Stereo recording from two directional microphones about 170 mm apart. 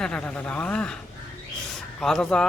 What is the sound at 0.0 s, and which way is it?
Speech, 5° left (ahead or behind).